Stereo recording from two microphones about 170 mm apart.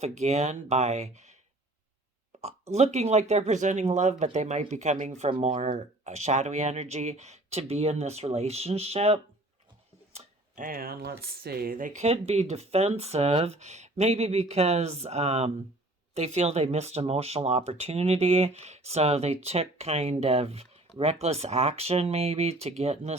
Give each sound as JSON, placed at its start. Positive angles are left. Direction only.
{"t": 0.0, "sound": "speech", "side_deg": -40}
{"t": 2.4, "sound": "speech", "side_deg": -40}
{"t": 10.1, "sound": "a sound", "side_deg": -40}
{"t": 10.6, "sound": "speech", "side_deg": -60}